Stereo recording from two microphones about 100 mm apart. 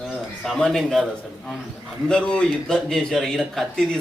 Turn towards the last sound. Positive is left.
turn(degrees=5)  # may be behind; listen again after turning